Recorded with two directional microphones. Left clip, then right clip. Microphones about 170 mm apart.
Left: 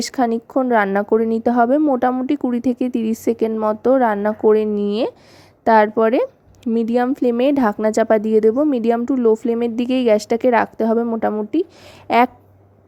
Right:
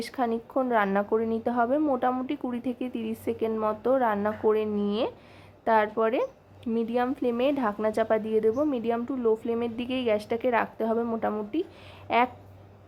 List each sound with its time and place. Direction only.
0.0 s a woman's voice: 45° left (ahead or behind)